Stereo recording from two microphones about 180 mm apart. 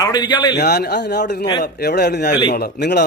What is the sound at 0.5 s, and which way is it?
Speech, 65° left (ahead or behind).